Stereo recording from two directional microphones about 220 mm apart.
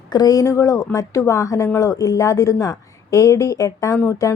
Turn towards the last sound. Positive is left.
turn(degrees=15)  # may be behind; listen again after turning